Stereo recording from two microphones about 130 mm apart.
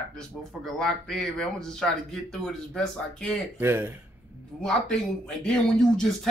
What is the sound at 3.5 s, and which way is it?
Speech, 15° right (ahead or behind).